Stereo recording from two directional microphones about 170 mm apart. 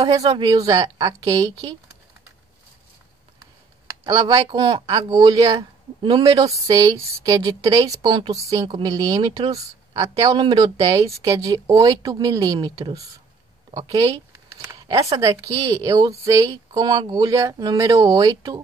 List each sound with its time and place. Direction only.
0.2 s speech: 30° right (ahead or behind)
4.0 s speech: 25° right (ahead or behind)